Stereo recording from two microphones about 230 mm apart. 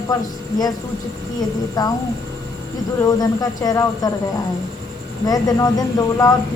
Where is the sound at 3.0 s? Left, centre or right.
Centre.